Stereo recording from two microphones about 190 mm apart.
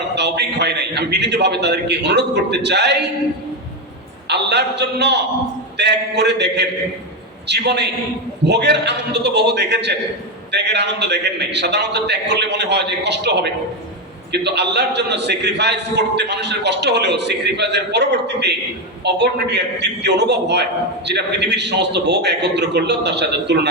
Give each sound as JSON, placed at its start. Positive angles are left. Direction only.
{"t": 0.2, "sound": "a man's voice", "side_deg": -60}
{"t": 4.3, "sound": "a man's voice", "side_deg": -60}